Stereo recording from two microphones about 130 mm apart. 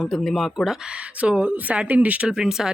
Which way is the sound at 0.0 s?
Centre (ahead or behind).